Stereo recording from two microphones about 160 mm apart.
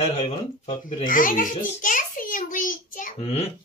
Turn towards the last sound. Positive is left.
turn(degrees=40)  # may be behind; listen again after turning